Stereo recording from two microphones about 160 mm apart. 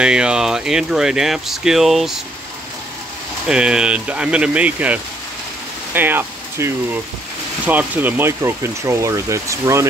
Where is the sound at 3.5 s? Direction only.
5° right (ahead or behind).